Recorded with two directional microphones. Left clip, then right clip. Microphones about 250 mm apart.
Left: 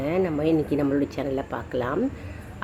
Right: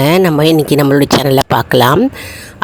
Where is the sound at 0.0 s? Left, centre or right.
Right.